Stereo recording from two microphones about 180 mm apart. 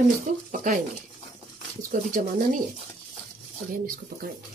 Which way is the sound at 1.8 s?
45° right (ahead or behind).